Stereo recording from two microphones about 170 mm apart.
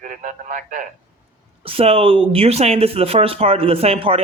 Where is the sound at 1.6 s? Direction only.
35° right (ahead or behind).